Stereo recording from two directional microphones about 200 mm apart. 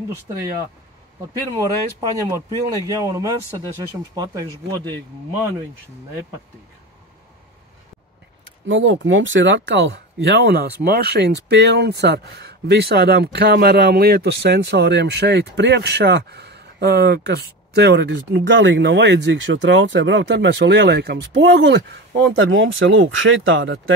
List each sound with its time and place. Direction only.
2.0 s speech: 15° right (ahead or behind)
8.6 s speech: 70° right (ahead or behind)